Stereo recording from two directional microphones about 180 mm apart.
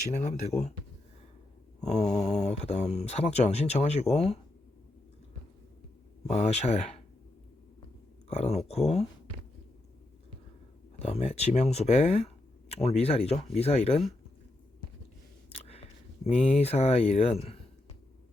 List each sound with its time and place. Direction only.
0.1 s speech: 40° left (ahead or behind)
1.8 s speech: 40° left (ahead or behind)
6.2 s speech: 35° left (ahead or behind)
8.3 s speech: 35° left (ahead or behind)
11.0 s speech: 35° left (ahead or behind)
15.6 s a sound: 35° left (ahead or behind)
16.6 s speech: 35° left (ahead or behind)